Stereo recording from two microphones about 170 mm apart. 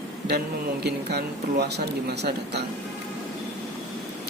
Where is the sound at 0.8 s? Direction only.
75° right (ahead or behind).